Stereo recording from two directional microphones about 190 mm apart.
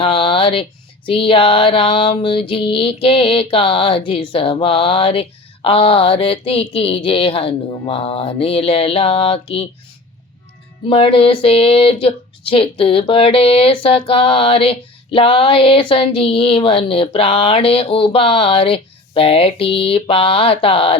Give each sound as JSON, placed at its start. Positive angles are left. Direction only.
{"t": 0.0, "sound": "speech", "side_deg": 30}
{"t": 10.8, "sound": "speech", "side_deg": 30}